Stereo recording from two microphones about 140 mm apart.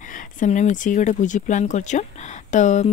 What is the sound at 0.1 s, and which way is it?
Speech, 65° left (ahead or behind).